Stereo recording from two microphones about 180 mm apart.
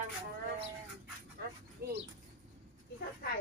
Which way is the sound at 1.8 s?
60° right (ahead or behind).